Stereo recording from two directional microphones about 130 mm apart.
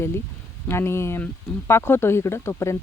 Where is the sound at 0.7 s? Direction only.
20° left (ahead or behind).